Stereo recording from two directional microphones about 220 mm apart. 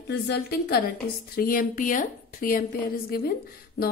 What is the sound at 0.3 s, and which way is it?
A woman's voice, 45° left (ahead or behind).